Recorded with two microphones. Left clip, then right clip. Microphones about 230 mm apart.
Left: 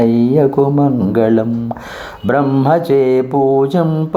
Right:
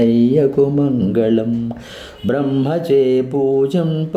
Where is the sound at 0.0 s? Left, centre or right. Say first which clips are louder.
Left 2 dB; centre.